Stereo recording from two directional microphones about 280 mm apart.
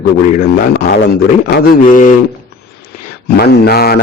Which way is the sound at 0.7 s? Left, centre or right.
Left.